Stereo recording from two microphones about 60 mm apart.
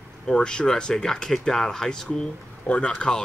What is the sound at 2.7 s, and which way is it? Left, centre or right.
Speech, centre.